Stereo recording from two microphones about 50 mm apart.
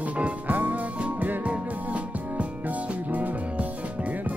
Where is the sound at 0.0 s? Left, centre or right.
Right.